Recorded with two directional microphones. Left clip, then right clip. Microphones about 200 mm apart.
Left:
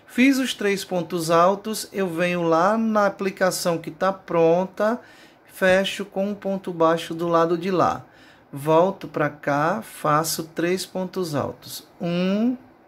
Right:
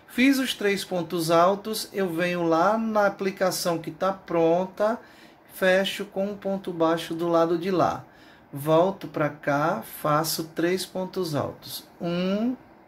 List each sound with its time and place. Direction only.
0.1 s speech: 20° left (ahead or behind)